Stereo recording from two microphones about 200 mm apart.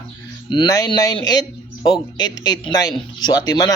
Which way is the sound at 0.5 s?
20° left (ahead or behind).